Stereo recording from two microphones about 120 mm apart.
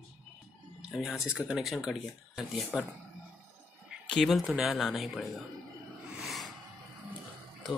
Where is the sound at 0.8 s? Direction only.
5° right (ahead or behind).